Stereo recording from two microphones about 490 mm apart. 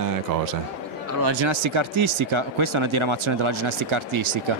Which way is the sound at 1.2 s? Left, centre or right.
Right.